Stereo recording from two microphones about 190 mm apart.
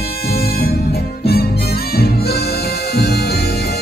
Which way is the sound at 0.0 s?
55° left (ahead or behind).